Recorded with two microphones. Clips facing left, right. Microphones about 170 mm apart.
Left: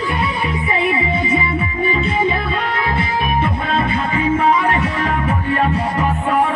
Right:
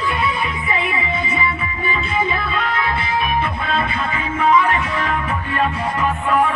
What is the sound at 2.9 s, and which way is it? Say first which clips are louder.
Music: left 1 dB; 35° left (ahead or behind).